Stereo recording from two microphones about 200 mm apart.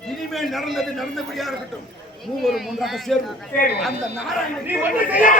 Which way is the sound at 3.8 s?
5° right (ahead or behind).